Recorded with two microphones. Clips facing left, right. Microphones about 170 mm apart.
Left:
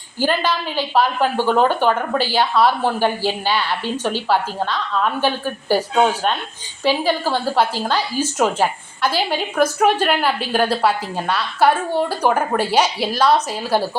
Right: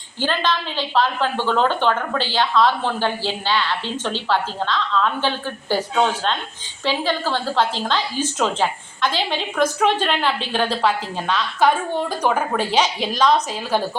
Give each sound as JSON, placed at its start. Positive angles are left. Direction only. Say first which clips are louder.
{"t": 0.2, "sound": "a woman's voice", "louder": "left 2 dB", "side_deg": 10}